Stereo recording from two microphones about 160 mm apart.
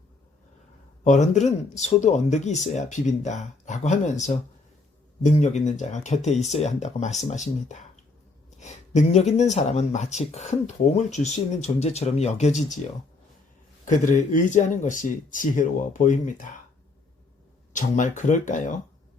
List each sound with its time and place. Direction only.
1.0 s speech: 50° left (ahead or behind)
13.8 s speech: 50° left (ahead or behind)
17.7 s speech: 50° left (ahead or behind)